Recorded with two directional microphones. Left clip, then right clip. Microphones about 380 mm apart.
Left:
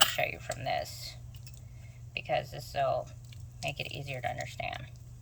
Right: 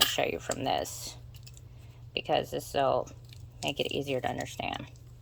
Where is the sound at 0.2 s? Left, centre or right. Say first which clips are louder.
Right 3 dB; centre.